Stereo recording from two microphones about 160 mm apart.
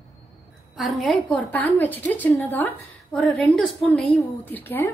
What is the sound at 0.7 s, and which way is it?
A woman's voice, centre (ahead or behind).